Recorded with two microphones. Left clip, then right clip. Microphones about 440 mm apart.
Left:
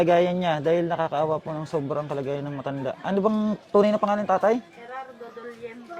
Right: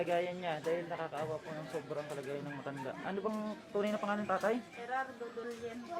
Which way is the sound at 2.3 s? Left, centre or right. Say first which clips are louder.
Left 12 dB; left.